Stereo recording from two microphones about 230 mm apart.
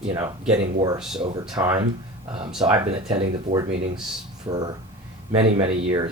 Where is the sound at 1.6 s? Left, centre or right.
Centre.